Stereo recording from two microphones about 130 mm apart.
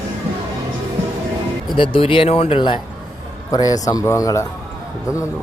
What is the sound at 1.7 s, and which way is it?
Speech, 40° left (ahead or behind).